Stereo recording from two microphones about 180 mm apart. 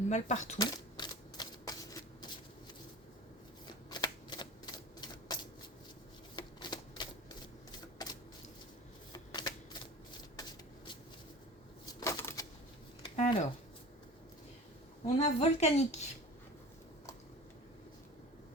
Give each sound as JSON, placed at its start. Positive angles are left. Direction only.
{"t": 0.1, "sound": "speech", "side_deg": 40}
{"t": 0.6, "sound": "typewriter", "side_deg": 25}
{"t": 3.8, "sound": "typewriter", "side_deg": 25}
{"t": 6.3, "sound": "shuffling cards", "side_deg": 25}
{"t": 9.1, "sound": "shuffling cards", "side_deg": 25}
{"t": 11.9, "sound": "coin", "side_deg": 20}
{"t": 13.1, "sound": "a sound", "side_deg": 40}
{"t": 15.0, "sound": "speech", "side_deg": 35}